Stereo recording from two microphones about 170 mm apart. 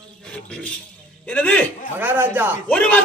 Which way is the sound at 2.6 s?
5° left (ahead or behind).